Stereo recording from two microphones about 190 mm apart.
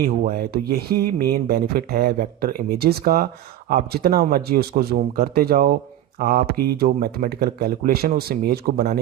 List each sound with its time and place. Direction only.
0.0 s speech: 50° right (ahead or behind)